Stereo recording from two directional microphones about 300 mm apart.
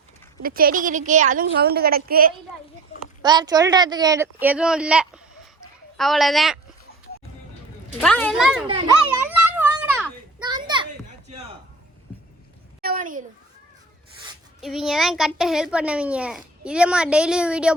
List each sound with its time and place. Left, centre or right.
0.4 s a woman's voice: right
3.2 s a child's voice: centre
8.0 s a child's voice: centre
9.2 s children playing: centre
12.8 s a sound: right
14.6 s a child's voice: centre